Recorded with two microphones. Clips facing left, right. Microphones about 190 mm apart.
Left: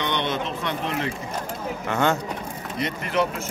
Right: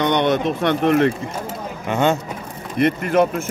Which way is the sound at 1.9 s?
20° right (ahead or behind).